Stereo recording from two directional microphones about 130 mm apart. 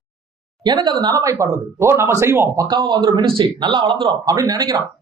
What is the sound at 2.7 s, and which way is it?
Speech, 35° right (ahead or behind).